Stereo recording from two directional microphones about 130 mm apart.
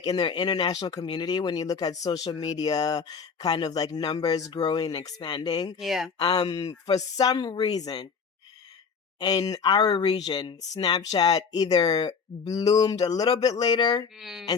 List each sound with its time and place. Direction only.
0.0 s speech: 35° left (ahead or behind)
5.8 s speech: centre (ahead or behind)
6.1 s speech: 35° left (ahead or behind)
9.1 s speech: 30° left (ahead or behind)
14.2 s speech: centre (ahead or behind)